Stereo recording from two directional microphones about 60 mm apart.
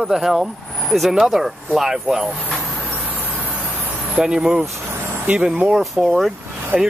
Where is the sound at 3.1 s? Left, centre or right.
Right.